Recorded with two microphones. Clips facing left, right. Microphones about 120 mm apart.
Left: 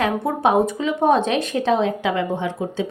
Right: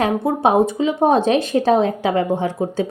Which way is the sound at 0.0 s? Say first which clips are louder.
Right 2 dB; 30° right (ahead or behind).